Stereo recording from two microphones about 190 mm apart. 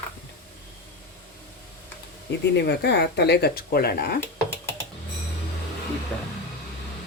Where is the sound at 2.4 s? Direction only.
60° left (ahead or behind).